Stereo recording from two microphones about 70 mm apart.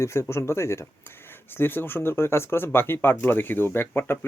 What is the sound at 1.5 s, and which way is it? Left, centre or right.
Speech, left.